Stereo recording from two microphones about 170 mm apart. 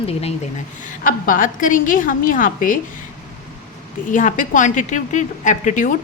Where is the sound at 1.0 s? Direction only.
55° left (ahead or behind).